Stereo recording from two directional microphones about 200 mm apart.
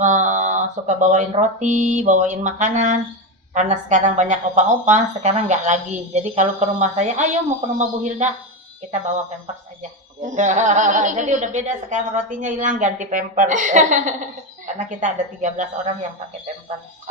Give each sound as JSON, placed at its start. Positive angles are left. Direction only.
{"t": 0.0, "sound": "a woman's voice", "side_deg": -40}
{"t": 10.2, "sound": "a woman's voice", "side_deg": -35}